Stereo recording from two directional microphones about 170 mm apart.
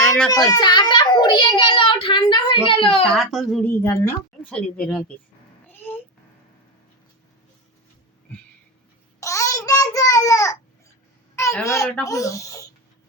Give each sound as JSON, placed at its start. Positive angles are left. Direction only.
{"t": 0.3, "sound": "a child's voice", "side_deg": 20}
{"t": 3.0, "sound": "speech", "side_deg": 5}
{"t": 3.7, "sound": "a woman's voice", "side_deg": 15}
{"t": 5.6, "sound": "a sound", "side_deg": 10}
{"t": 8.3, "sound": "a sound", "side_deg": 10}
{"t": 9.2, "sound": "babbling", "side_deg": 20}
{"t": 11.6, "sound": "a woman's voice", "side_deg": 20}